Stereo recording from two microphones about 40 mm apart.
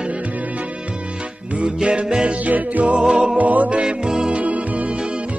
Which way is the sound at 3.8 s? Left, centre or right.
Right.